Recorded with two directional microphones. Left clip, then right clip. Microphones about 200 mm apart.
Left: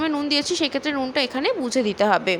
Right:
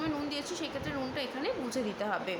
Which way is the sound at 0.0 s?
45° left (ahead or behind).